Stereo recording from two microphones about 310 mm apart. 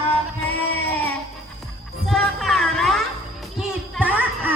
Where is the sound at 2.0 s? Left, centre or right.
Centre.